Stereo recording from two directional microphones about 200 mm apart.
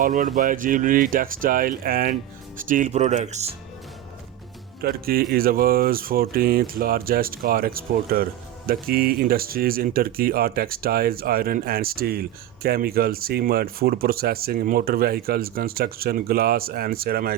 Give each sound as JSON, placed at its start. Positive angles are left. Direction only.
{"t": 0.0, "sound": "speech", "side_deg": -45}
{"t": 4.8, "sound": "speech", "side_deg": -50}